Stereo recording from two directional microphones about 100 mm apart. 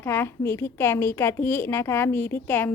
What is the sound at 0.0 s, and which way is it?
A woman's voice, 25° left (ahead or behind).